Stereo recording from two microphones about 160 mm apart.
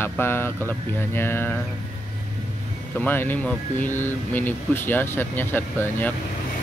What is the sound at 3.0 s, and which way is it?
Speech, 10° left (ahead or behind).